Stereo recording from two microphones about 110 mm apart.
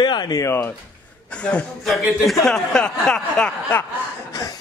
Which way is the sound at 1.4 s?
10° left (ahead or behind).